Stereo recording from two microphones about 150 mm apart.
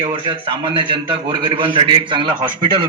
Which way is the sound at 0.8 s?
35° right (ahead or behind).